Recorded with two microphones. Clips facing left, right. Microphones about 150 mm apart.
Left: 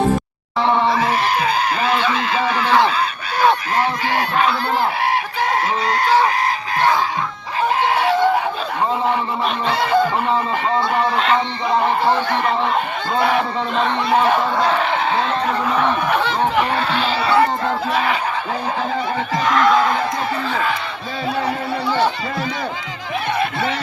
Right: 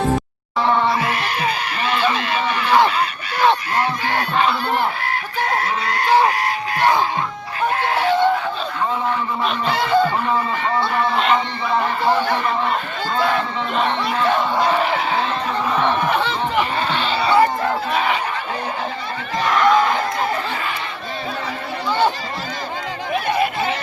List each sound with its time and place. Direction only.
4.9 s fowl: 90° left
9.6 s speech: centre (ahead or behind)
15.8 s speech: centre (ahead or behind)